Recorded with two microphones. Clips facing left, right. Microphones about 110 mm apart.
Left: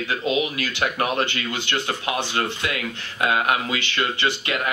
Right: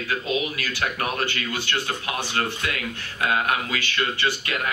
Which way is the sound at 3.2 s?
20° left (ahead or behind).